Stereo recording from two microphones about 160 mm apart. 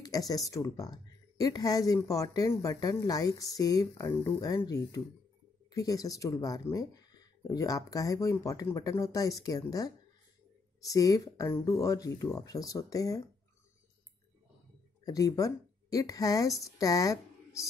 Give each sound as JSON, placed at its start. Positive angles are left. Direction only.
{"t": 0.0, "sound": "speech", "side_deg": 25}
{"t": 15.0, "sound": "speech", "side_deg": 20}